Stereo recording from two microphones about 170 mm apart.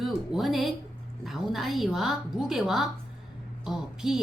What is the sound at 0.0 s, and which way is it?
A woman's voice, centre (ahead or behind).